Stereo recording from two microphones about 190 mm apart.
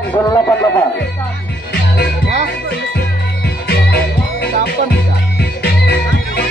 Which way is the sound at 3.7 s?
55° left (ahead or behind).